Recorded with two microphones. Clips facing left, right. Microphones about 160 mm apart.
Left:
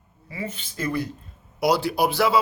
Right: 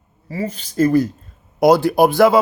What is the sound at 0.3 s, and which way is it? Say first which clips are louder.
Speech: right 8 dB; 40° right (ahead or behind).